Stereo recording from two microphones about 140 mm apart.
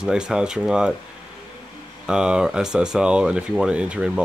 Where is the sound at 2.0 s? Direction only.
5° right (ahead or behind).